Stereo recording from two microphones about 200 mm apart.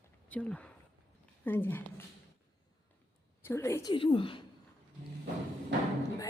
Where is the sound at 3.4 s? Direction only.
15° left (ahead or behind).